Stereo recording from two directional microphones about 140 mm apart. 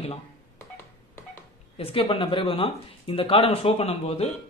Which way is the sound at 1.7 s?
40° left (ahead or behind).